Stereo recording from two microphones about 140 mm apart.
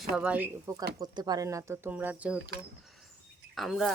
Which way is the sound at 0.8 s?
30° right (ahead or behind).